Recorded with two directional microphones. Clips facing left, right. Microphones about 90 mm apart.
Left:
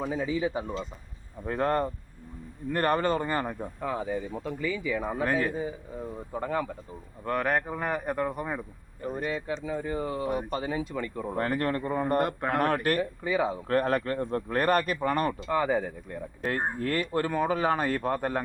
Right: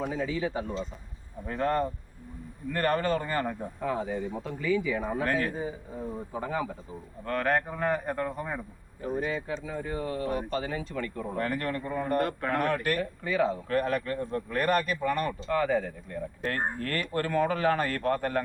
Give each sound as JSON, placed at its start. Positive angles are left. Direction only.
{"t": 0.0, "sound": "speech", "side_deg": 10}
{"t": 1.5, "sound": "speech", "side_deg": 30}
{"t": 3.8, "sound": "speech", "side_deg": 0}
{"t": 6.3, "sound": "speech", "side_deg": -5}
{"t": 7.3, "sound": "speech", "side_deg": 10}
{"t": 11.3, "sound": "speech", "side_deg": 40}
{"t": 12.2, "sound": "speech", "side_deg": 25}
{"t": 12.5, "sound": "speech", "side_deg": 40}
{"t": 13.0, "sound": "speech", "side_deg": 10}
{"t": 13.7, "sound": "speech", "side_deg": 40}
{"t": 15.4, "sound": "speech", "side_deg": 15}